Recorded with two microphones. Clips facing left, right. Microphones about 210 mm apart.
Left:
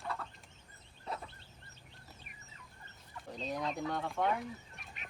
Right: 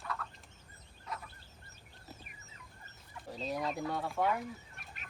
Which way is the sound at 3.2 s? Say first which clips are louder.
Right 1 dB; 5° right (ahead or behind).